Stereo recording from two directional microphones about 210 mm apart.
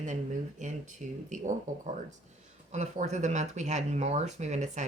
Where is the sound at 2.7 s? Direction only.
35° right (ahead or behind).